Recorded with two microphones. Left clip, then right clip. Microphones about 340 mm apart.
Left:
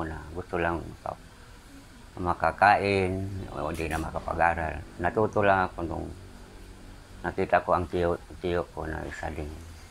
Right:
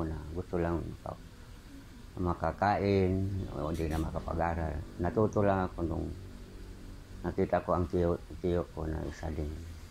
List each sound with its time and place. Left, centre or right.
0.0 s a sound: left
2.1 s speech: left
7.2 s speech: left